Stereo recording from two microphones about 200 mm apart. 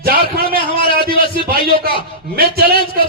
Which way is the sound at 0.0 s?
50° right (ahead or behind).